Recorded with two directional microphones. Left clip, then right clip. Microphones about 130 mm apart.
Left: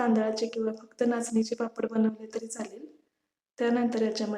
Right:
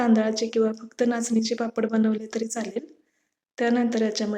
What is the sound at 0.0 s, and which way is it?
Speech, 25° right (ahead or behind).